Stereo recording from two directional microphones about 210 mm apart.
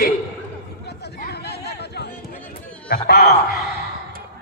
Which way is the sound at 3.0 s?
50° left (ahead or behind).